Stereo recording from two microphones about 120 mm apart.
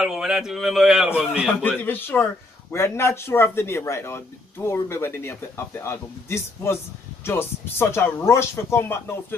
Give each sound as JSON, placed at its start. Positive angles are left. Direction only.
{"t": 0.0, "sound": "a man's voice", "side_deg": -5}
{"t": 1.6, "sound": "a man's voice", "side_deg": 15}